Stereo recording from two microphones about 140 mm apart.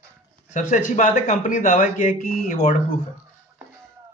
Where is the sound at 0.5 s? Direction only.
60° left (ahead or behind).